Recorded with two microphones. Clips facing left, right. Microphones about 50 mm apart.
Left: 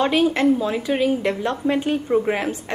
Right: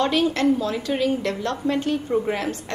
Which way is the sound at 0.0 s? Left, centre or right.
Centre.